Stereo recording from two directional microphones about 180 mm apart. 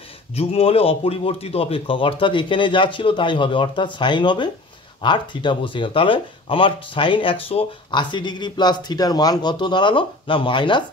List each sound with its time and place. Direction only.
0.4 s speech: 35° left (ahead or behind)